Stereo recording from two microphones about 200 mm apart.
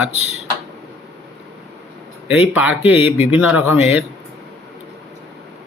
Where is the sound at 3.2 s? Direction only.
5° right (ahead or behind).